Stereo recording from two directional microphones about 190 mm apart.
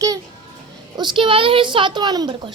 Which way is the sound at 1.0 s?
25° right (ahead or behind).